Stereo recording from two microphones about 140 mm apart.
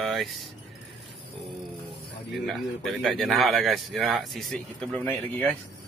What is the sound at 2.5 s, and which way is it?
A man's voice, centre (ahead or behind).